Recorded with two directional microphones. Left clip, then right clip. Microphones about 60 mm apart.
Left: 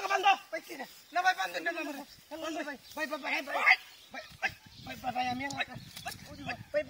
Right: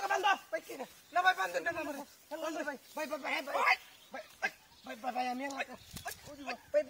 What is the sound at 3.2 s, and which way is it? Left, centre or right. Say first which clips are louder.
Speech: left 2 dB; right.